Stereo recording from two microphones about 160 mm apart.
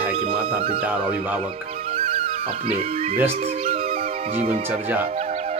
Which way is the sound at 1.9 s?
35° right (ahead or behind).